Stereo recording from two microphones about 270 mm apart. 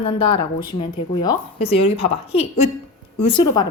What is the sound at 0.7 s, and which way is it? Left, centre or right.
A woman's voice, centre.